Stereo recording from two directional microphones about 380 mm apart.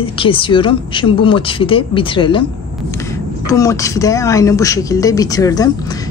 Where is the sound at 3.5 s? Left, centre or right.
Centre.